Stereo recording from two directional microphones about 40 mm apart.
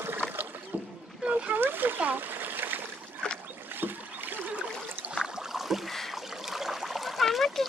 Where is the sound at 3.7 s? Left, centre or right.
Right.